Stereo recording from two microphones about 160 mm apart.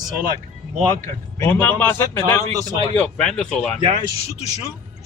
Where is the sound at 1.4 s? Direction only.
10° left (ahead or behind).